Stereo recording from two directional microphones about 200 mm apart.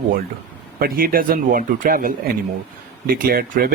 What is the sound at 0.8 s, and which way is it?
Speech, 50° right (ahead or behind).